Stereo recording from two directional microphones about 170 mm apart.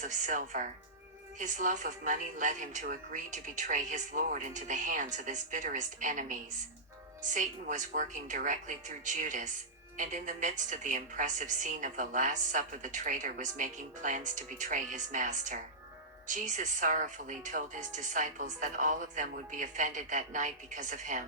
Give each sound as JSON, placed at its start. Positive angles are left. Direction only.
{"t": 0.0, "sound": "a woman's voice", "side_deg": -45}